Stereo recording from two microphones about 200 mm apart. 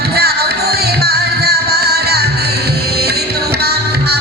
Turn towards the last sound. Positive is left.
turn(degrees=-55)  # may be behind; listen again after turning